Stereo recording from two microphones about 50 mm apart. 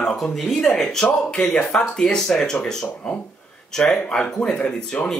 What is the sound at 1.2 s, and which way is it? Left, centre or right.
Speech, left.